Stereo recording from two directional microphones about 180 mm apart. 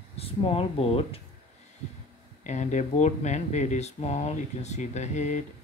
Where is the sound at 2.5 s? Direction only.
40° left (ahead or behind).